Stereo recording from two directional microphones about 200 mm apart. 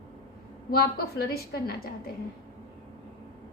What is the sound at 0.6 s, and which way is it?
A woman's voice, 50° left (ahead or behind).